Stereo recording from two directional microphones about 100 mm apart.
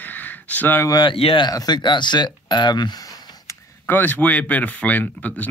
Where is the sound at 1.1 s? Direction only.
70° left (ahead or behind).